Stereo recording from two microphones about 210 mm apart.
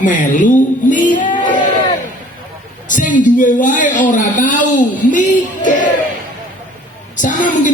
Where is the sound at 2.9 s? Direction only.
40° left (ahead or behind).